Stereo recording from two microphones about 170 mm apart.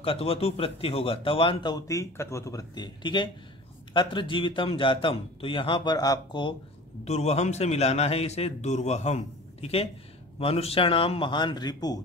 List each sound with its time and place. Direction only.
0.0 s a man's voice: 35° left (ahead or behind)
7.1 s speech: 40° left (ahead or behind); by 12.0 s 25° left (ahead or behind)